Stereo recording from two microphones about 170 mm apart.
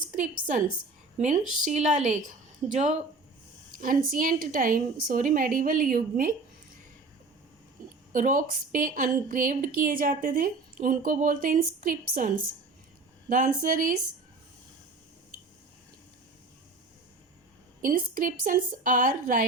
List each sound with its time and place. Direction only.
0.2 s a woman's voice: 50° right (ahead or behind)
8.1 s a woman's voice: 50° right (ahead or behind)
13.3 s a woman's voice: 50° right (ahead or behind)
17.8 s a woman's voice: 55° right (ahead or behind)